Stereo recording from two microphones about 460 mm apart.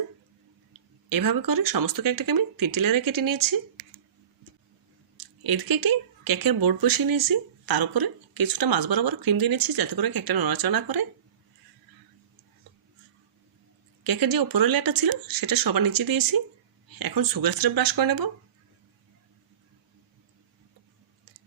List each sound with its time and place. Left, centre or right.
1.1 s speech: right
5.1 s speech: right
14.0 s speech: right